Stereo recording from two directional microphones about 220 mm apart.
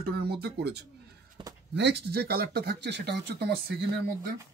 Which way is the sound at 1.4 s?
20° right (ahead or behind).